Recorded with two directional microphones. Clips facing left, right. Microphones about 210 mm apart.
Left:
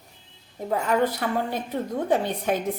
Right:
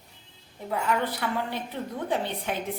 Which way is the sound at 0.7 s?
45° left (ahead or behind).